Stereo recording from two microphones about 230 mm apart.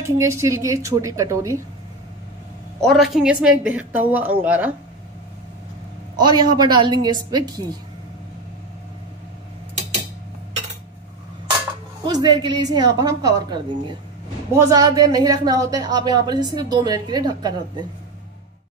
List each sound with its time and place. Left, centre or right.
0.2 s a woman's voice: centre
2.8 s speech: centre
6.1 s a woman's voice: centre
12.1 s a woman's voice: centre